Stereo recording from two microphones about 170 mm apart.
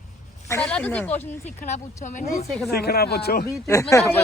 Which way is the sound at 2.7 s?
65° left (ahead or behind).